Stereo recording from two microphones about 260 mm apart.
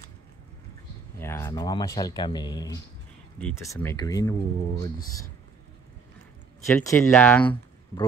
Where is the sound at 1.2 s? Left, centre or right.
Centre.